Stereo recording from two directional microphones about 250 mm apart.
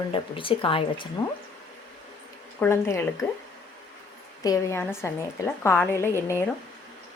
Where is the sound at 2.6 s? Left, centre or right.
Centre.